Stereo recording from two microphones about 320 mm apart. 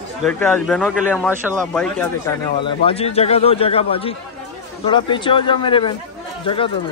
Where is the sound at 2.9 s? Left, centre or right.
Centre.